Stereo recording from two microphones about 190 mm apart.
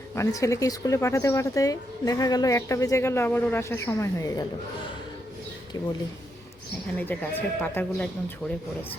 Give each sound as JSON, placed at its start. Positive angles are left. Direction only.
{"t": 0.1, "sound": "speech", "side_deg": 15}
{"t": 5.7, "sound": "a man's voice", "side_deg": 20}
{"t": 6.9, "sound": "speech", "side_deg": 10}